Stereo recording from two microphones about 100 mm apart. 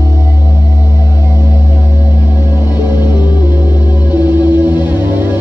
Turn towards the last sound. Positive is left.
turn(degrees=-20)  # may be behind; listen again after turning